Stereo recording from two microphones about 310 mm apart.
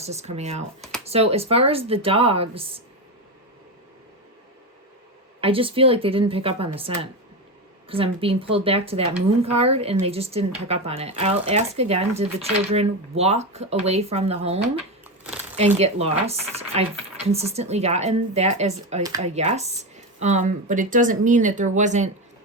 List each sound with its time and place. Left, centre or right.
0.0 s speech: right
0.8 s a sound: centre
1.0 s speech: centre
5.4 s a woman's voice: centre